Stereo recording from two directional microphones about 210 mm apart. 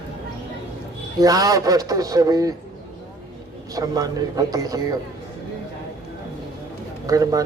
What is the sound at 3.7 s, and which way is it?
A man's voice, 15° right (ahead or behind).